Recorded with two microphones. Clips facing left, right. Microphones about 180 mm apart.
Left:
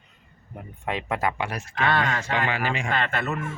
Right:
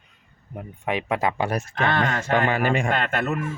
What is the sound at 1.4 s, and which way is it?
Speech, 45° right (ahead or behind).